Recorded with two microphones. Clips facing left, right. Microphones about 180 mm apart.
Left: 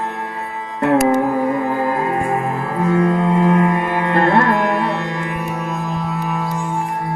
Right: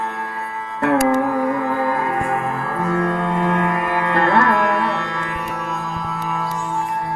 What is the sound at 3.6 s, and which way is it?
Music, 25° left (ahead or behind).